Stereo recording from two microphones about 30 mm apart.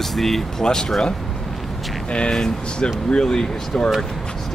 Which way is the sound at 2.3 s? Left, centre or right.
Left.